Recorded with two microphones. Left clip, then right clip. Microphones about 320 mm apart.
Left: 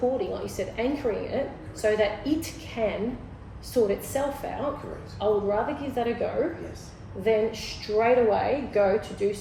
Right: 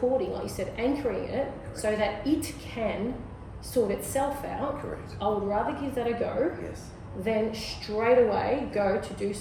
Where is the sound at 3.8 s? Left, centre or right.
Centre.